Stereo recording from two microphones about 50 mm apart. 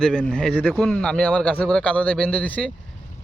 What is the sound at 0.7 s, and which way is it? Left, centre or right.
Speech, centre.